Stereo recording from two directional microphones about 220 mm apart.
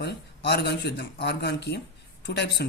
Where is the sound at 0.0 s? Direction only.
50° left (ahead or behind).